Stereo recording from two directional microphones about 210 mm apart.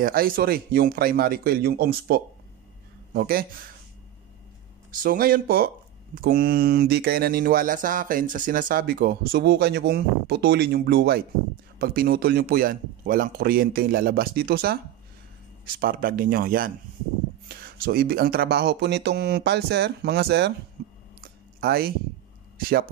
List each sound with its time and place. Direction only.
0.0 s speech: 45° right (ahead or behind)
5.0 s speech: 45° right (ahead or behind)
20.8 s cough: 50° right (ahead or behind)
21.5 s speech: 45° right (ahead or behind)